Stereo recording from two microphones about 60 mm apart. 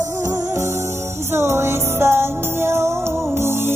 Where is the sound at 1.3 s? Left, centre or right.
Right.